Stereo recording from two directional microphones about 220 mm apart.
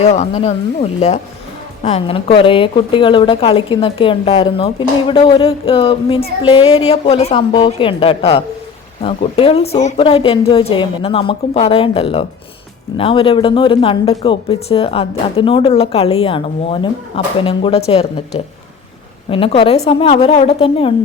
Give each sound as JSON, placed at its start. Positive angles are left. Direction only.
{"t": 0.0, "sound": "a woman's voice", "side_deg": 30}
{"t": 19.3, "sound": "a woman's voice", "side_deg": 25}